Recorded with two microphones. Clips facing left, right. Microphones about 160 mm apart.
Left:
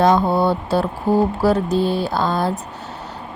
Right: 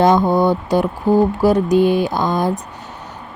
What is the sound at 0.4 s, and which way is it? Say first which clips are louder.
A woman's voice: right 3 dB; 15° right (ahead or behind).